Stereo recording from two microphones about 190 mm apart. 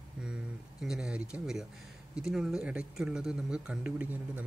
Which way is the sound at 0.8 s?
Centre (ahead or behind).